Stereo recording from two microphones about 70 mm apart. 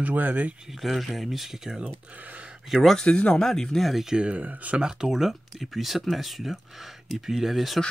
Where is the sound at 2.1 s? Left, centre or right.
Right.